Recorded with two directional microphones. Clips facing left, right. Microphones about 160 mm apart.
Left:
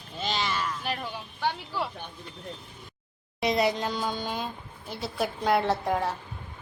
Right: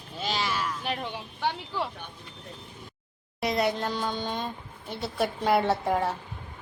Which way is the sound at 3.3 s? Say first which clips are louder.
Left 1 dB; centre (ahead or behind).